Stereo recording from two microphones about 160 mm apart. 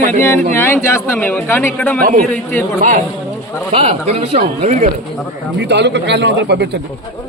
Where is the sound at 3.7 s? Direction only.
40° right (ahead or behind).